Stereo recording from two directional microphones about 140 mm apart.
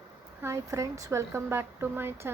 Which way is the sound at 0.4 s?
20° right (ahead or behind).